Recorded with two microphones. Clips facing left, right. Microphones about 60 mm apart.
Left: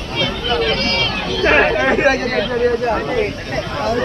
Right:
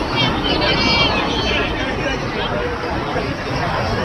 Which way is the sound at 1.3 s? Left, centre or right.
Left.